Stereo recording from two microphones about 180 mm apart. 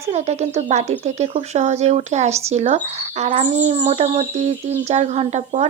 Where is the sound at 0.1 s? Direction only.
40° right (ahead or behind).